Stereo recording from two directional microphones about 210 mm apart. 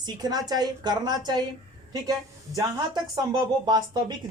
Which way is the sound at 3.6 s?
20° right (ahead or behind).